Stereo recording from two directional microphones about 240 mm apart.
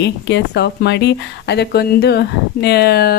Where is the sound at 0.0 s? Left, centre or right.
Left.